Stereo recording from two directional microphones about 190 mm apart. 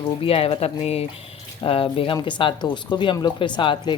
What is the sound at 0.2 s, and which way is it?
Speech, 30° left (ahead or behind).